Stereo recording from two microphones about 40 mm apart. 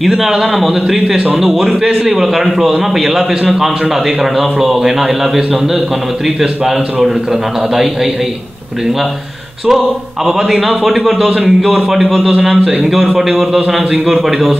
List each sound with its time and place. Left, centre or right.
0.0 s a man's voice: centre
9.7 s speech: centre
11.2 s a man's voice: centre
11.6 s speech: centre
12.5 s a man's voice: right
12.8 s a man's voice: centre